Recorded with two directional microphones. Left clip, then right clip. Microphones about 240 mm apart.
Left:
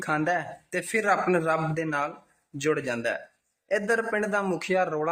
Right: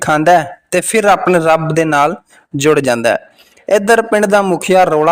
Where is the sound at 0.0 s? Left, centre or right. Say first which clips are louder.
Right 17 dB; right.